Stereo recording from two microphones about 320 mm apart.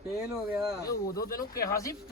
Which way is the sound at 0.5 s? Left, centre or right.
Centre.